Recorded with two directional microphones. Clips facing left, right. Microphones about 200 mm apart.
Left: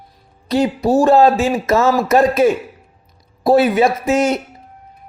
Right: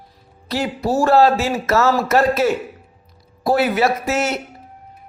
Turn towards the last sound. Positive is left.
turn(degrees=15)  # may be behind; listen again after turning